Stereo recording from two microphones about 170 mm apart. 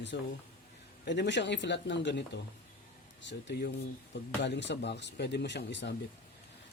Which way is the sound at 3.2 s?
90° left.